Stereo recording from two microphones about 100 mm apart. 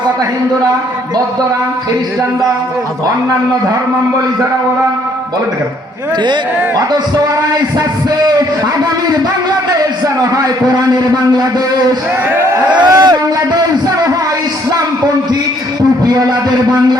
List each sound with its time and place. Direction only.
10.3 s a man's voice: 40° right (ahead or behind)